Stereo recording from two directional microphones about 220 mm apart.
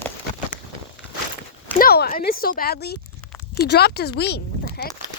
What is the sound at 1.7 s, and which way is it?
Speech, 45° left (ahead or behind).